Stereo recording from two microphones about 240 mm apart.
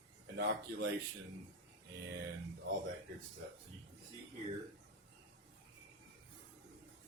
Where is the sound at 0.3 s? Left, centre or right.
Right.